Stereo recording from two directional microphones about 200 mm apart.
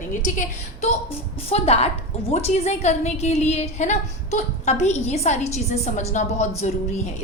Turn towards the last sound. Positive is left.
turn(degrees=35)  # may be behind; listen again after turning